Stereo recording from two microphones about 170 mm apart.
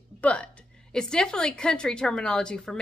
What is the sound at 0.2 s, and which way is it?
A woman's voice, 5° left (ahead or behind).